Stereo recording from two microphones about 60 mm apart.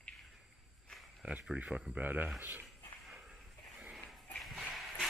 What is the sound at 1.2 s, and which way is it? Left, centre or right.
Speech, right.